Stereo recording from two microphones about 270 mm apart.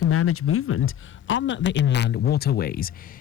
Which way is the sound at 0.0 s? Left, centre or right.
Left.